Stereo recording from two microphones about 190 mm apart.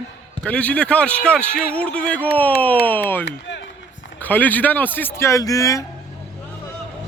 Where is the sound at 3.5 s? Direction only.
75° left (ahead or behind).